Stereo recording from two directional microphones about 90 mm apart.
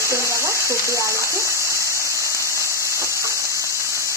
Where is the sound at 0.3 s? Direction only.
30° right (ahead or behind).